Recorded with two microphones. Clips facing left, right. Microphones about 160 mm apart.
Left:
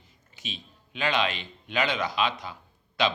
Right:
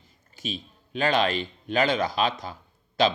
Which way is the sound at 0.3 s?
45° right (ahead or behind).